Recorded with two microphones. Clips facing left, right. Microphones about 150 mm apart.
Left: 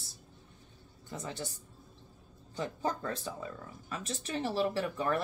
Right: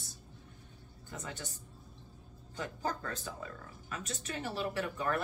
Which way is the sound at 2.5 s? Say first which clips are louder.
Left 3 dB; 25° left (ahead or behind).